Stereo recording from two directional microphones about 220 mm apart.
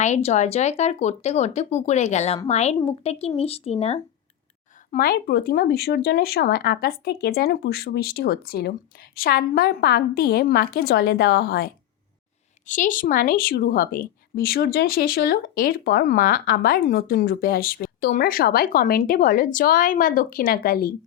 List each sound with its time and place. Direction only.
0.0 s a woman's voice: 30° left (ahead or behind)
4.9 s speech: 40° left (ahead or behind)
12.6 s a woman's voice: 35° left (ahead or behind)